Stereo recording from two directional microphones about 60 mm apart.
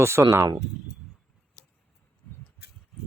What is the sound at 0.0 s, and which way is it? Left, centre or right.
Speech, right.